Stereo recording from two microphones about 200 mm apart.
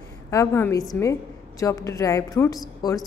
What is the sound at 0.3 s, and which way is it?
A woman's voice, 15° left (ahead or behind).